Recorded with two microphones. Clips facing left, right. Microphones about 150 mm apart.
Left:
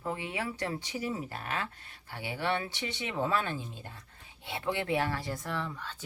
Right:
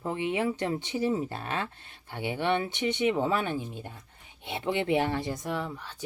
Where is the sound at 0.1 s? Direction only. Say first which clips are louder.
Right 7 dB; 20° right (ahead or behind).